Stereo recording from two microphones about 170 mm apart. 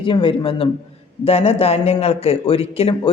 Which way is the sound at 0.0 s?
30° left (ahead or behind).